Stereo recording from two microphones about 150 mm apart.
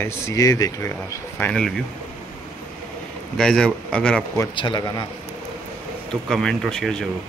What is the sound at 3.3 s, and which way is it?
Speech, 5° left (ahead or behind).